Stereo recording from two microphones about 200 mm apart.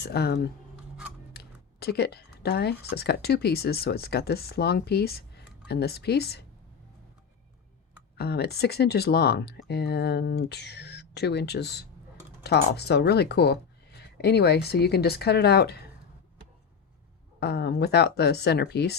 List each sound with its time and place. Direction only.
0.0 s speech: 55° left (ahead or behind)
1.8 s a woman's voice: 55° left (ahead or behind)
8.1 s speech: 55° left (ahead or behind)
17.4 s speech: 55° left (ahead or behind)